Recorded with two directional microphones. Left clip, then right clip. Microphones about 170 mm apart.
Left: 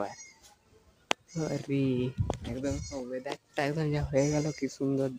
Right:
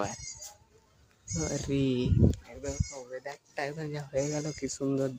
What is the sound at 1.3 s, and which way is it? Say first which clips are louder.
Speech: even; centre (ahead or behind).